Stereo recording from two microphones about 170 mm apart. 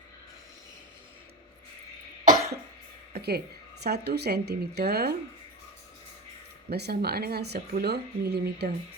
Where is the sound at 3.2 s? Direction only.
70° right (ahead or behind).